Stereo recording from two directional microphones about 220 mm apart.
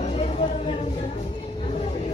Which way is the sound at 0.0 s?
25° left (ahead or behind).